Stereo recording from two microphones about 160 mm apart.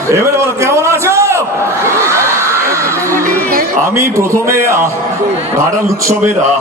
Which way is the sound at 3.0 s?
60° right (ahead or behind).